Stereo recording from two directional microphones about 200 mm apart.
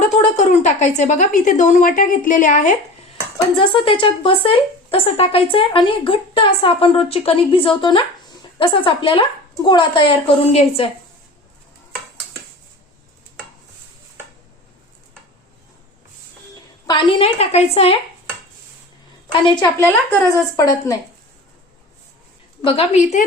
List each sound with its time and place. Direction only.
0.1 s speech: 35° left (ahead or behind)
3.3 s speech: 25° left (ahead or behind)
16.8 s speech: 25° left (ahead or behind)
19.3 s a woman's voice: 20° left (ahead or behind)
22.6 s speech: 30° left (ahead or behind)